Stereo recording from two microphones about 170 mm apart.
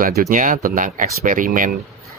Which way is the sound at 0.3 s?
50° right (ahead or behind).